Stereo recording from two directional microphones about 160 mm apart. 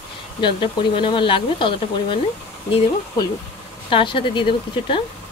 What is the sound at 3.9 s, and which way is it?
Speech, 30° left (ahead or behind).